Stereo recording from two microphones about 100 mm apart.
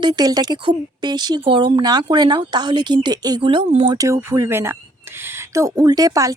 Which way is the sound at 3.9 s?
35° right (ahead or behind).